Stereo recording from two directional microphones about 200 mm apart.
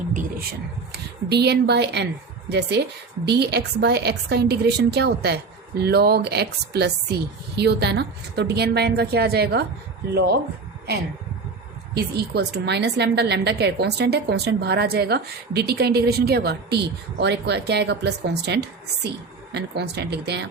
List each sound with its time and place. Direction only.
0.1 s speech: 40° right (ahead or behind)
1.3 s a woman's voice: 55° right (ahead or behind)
11.9 s a woman's voice: 55° right (ahead or behind)